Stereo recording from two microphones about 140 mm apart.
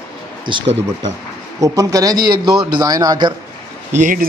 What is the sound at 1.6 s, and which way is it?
A man's voice, 25° right (ahead or behind).